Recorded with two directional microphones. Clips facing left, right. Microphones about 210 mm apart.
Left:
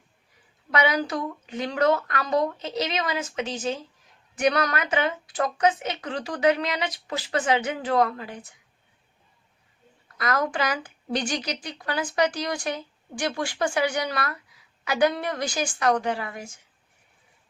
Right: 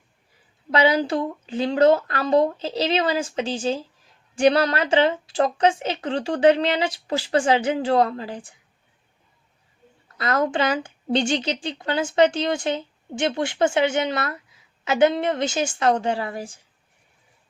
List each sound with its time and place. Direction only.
0.7 s speech: 30° right (ahead or behind)
10.2 s speech: 25° right (ahead or behind)